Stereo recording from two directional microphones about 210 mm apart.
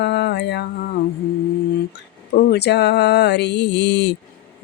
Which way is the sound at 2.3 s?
50° left (ahead or behind).